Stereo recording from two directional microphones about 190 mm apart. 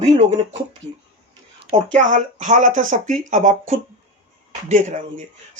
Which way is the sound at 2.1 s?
40° right (ahead or behind).